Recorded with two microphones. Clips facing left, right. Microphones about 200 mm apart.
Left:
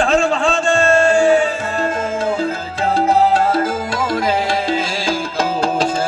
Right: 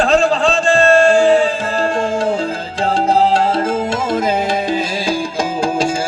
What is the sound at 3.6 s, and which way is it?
Music, 25° right (ahead or behind).